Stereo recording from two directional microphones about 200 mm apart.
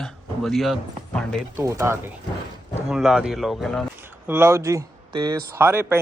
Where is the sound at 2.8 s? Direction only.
Centre (ahead or behind).